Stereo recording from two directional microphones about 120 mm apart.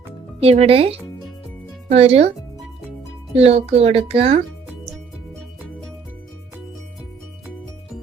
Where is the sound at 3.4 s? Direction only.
55° right (ahead or behind).